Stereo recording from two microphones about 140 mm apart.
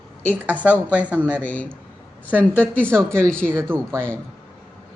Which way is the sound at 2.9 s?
15° right (ahead or behind).